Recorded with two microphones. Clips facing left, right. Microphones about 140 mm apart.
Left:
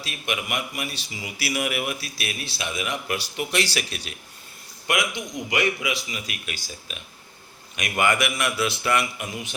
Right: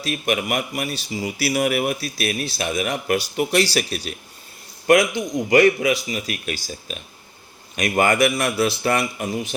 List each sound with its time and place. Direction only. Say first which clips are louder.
0.0 s speech: right 8 dB; 45° right (ahead or behind)